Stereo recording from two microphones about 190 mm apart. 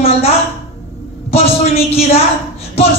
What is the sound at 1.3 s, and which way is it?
Speech, 30° left (ahead or behind).